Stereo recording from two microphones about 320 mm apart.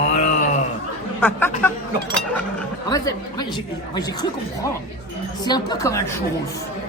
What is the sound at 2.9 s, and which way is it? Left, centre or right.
A woman's voice, centre.